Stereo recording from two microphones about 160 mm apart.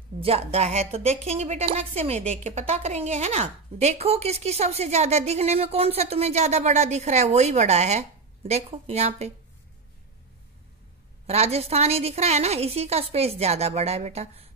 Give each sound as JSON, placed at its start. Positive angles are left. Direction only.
{"t": 0.2, "sound": "a woman's voice", "side_deg": -40}
{"t": 11.2, "sound": "a woman's voice", "side_deg": -40}